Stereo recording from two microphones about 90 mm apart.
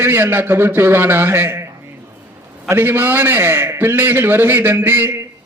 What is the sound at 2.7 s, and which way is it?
A man's voice, 25° right (ahead or behind).